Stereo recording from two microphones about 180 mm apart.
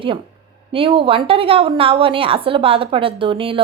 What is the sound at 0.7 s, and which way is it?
A woman's voice, 30° right (ahead or behind).